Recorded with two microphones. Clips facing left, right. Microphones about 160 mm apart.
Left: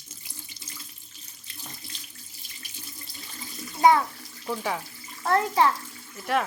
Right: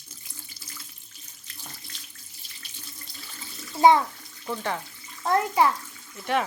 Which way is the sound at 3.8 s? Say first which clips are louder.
Right 2 dB; 25° right (ahead or behind).